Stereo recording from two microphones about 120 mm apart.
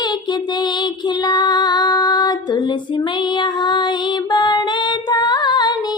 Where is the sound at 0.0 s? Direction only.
35° left (ahead or behind).